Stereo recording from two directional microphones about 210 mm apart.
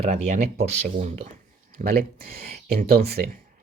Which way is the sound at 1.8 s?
45° right (ahead or behind).